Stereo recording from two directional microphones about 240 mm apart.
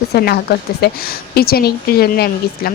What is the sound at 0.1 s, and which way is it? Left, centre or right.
A woman's voice, left.